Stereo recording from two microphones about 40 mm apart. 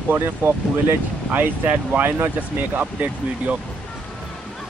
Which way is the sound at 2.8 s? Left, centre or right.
Right.